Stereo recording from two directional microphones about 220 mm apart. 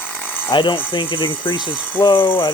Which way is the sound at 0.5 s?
20° left (ahead or behind).